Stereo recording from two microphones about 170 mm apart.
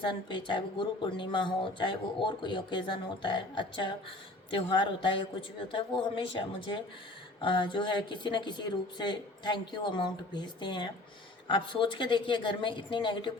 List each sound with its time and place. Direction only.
0.0 s speech: 30° left (ahead or behind)